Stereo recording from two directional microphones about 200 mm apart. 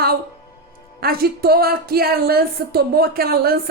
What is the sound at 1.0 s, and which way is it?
Speech, 50° right (ahead or behind).